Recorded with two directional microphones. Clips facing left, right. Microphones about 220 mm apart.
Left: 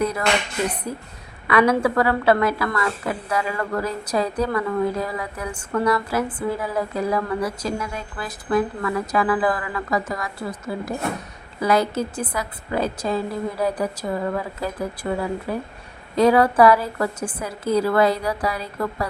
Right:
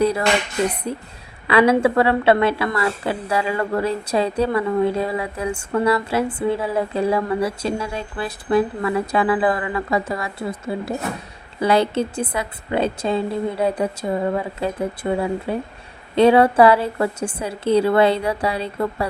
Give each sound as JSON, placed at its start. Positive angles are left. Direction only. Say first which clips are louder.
{"t": 0.9, "sound": "speech", "louder": "right 3 dB", "side_deg": -25}